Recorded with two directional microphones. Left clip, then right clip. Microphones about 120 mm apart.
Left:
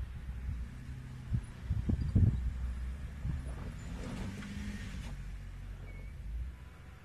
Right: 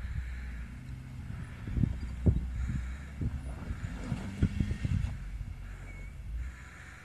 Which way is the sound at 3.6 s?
40° left (ahead or behind).